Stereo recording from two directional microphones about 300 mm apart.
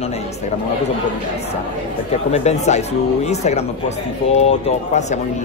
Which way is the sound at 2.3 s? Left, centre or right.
Left.